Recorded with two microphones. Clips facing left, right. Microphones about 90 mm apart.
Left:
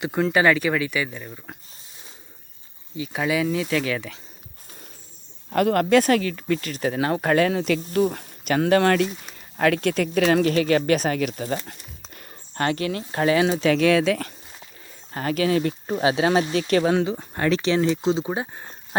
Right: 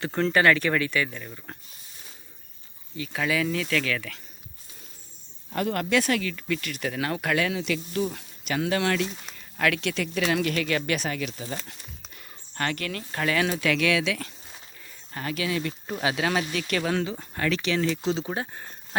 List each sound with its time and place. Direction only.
0.0 s speech: 10° left (ahead or behind)
3.0 s speech: 20° left (ahead or behind)
5.5 s speech: 60° left (ahead or behind)
9.6 s speech: 35° left (ahead or behind)
12.5 s speech: 30° left (ahead or behind)
16.9 s speech: 15° left (ahead or behind)
17.3 s speech: 30° left (ahead or behind)